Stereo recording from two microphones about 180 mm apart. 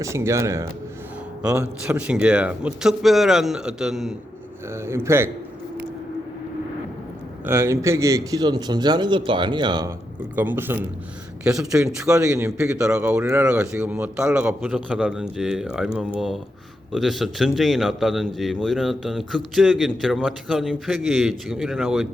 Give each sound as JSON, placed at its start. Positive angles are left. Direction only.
{"t": 0.0, "sound": "a man's voice", "side_deg": -15}
{"t": 4.7, "sound": "speech", "side_deg": -15}
{"t": 7.4, "sound": "a man's voice", "side_deg": -15}
{"t": 10.3, "sound": "a man's voice", "side_deg": -10}
{"t": 12.2, "sound": "a man's voice", "side_deg": -15}